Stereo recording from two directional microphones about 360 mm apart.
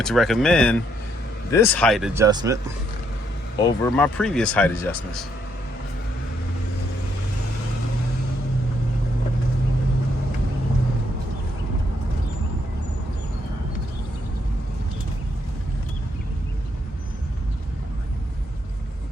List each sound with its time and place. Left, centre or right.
0.0 s speech: centre
3.6 s speech: centre